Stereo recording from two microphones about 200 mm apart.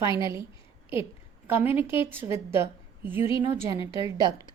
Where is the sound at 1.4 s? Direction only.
10° right (ahead or behind).